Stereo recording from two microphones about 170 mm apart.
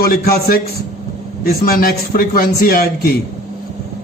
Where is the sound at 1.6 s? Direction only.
60° left (ahead or behind).